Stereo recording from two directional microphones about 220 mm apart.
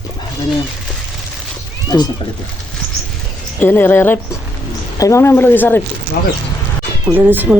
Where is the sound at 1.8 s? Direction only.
20° left (ahead or behind).